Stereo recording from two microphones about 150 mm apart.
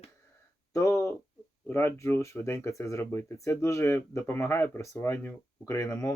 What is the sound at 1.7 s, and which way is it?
Speech, 15° left (ahead or behind).